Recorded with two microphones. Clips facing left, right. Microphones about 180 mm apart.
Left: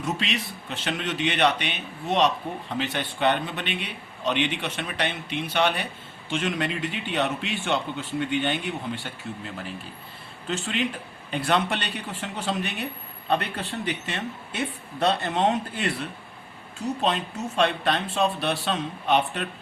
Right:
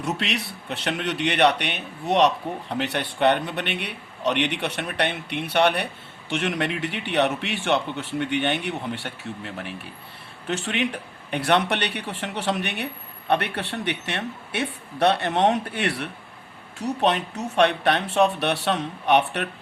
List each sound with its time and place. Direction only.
0.0 s speech: 65° right (ahead or behind)